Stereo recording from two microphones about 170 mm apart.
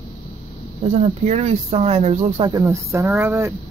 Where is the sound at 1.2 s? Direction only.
40° right (ahead or behind).